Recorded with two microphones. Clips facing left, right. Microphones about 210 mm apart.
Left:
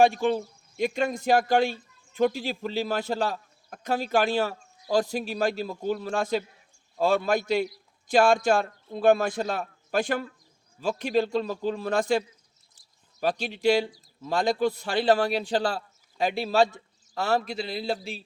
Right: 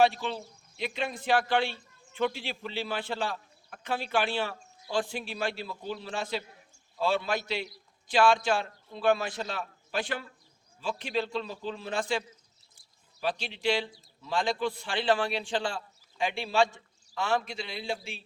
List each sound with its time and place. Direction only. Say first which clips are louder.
0.0 s a man's voice: left 5 dB; 50° left (ahead or behind)
13.2 s a man's voice: left 6 dB; 45° left (ahead or behind)